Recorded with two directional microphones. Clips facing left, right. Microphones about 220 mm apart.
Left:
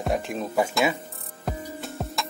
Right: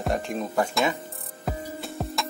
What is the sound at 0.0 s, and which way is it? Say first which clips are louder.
Speech: even; 5° left (ahead or behind).